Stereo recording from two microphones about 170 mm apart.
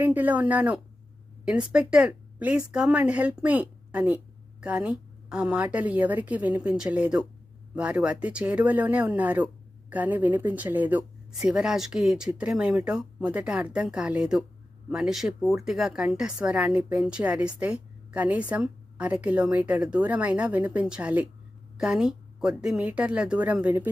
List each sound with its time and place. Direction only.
0.0 s a woman's voice: 10° right (ahead or behind)